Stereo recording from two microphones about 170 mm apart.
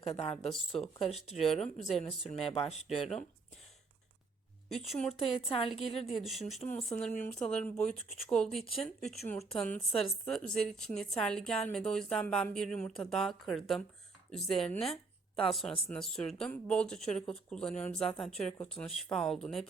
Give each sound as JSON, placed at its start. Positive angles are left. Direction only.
{"t": 0.2, "sound": "speech", "side_deg": 35}
{"t": 1.3, "sound": "a woman's voice", "side_deg": 0}
{"t": 2.4, "sound": "speech", "side_deg": 35}
{"t": 2.8, "sound": "a woman's voice", "side_deg": 0}
{"t": 4.9, "sound": "a woman's voice", "side_deg": 5}
{"t": 5.2, "sound": "speech", "side_deg": 30}
{"t": 6.1, "sound": "a woman's voice", "side_deg": 0}